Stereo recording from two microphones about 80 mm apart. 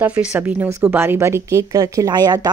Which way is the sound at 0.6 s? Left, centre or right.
Right.